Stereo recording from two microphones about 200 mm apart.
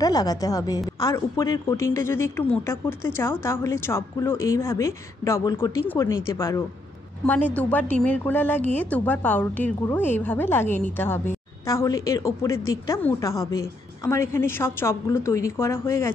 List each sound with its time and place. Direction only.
0.0 s a woman's voice: 20° left (ahead or behind)